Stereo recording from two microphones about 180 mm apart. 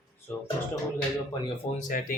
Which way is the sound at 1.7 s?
45° left (ahead or behind).